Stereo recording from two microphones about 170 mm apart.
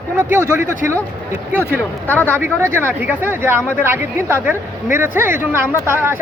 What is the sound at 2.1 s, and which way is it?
Speech, 10° left (ahead or behind).